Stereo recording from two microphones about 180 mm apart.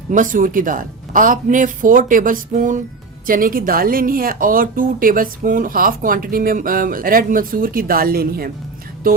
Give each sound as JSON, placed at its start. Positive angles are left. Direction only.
{"t": 0.1, "sound": "a woman's voice", "side_deg": -45}
{"t": 9.0, "sound": "music", "side_deg": -55}